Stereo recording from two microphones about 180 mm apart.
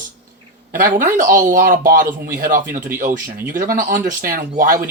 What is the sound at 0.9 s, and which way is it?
Speech, 45° right (ahead or behind).